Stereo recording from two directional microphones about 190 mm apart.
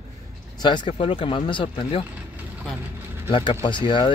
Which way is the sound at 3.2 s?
25° left (ahead or behind).